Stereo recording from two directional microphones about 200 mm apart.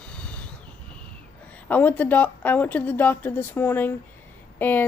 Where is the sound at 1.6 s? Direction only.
10° left (ahead or behind).